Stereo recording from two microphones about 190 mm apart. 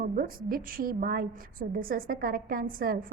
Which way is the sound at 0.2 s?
50° right (ahead or behind).